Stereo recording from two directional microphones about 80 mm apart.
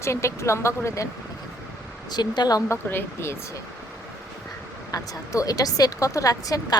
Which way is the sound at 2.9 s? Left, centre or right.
Left.